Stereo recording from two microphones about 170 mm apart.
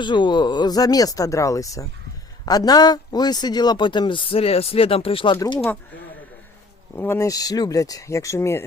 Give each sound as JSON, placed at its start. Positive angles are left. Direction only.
{"t": 0.0, "sound": "speech", "side_deg": 25}
{"t": 6.9, "sound": "speech", "side_deg": 15}